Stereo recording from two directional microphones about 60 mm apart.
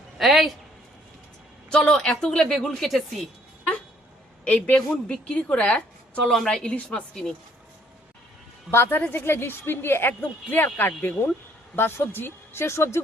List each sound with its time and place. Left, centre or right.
0.2 s speech: centre
1.7 s a woman's voice: centre
4.4 s a woman's voice: left
6.2 s a woman's voice: centre
8.7 s a woman's voice: left